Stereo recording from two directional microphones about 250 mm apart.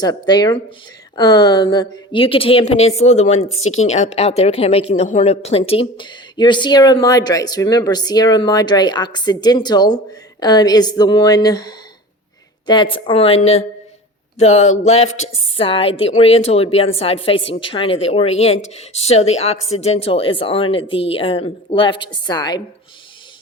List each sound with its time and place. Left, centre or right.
0.0 s a woman's voice: centre